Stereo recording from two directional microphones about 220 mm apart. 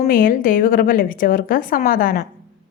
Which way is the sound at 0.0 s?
40° left (ahead or behind).